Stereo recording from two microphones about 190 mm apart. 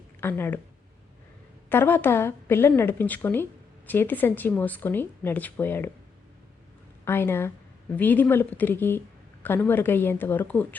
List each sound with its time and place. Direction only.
0.2 s speech: 10° left (ahead or behind)
1.7 s a woman's voice: 10° left (ahead or behind)
7.0 s a woman's voice: 10° left (ahead or behind)